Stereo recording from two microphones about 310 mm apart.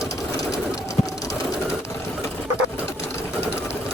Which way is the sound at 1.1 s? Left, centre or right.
Centre.